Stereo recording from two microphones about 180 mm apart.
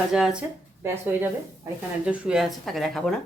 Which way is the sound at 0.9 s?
15° right (ahead or behind).